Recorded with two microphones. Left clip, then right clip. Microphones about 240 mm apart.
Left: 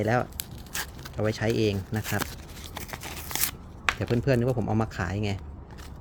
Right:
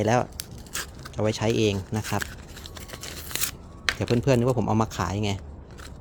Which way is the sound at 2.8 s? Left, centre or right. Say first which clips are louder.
Left 2 dB; centre.